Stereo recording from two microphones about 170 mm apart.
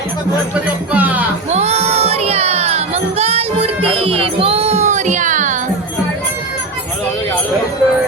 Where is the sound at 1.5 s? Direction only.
40° right (ahead or behind).